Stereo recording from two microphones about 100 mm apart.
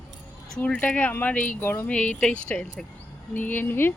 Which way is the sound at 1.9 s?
10° left (ahead or behind).